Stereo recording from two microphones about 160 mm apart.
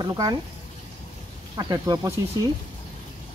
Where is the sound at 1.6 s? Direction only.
20° right (ahead or behind).